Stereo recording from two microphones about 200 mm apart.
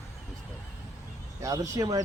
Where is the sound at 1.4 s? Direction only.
15° right (ahead or behind).